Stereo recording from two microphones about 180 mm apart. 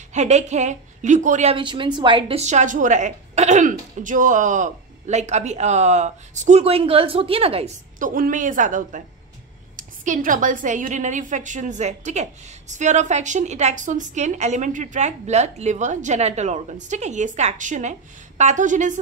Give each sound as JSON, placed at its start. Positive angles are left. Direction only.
{"t": 0.1, "sound": "a woman's voice", "side_deg": -40}
{"t": 1.6, "sound": "a woman's voice", "side_deg": -25}
{"t": 8.0, "sound": "a woman's voice", "side_deg": -50}